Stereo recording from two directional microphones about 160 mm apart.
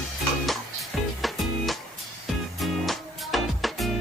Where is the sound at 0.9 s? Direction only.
Centre (ahead or behind).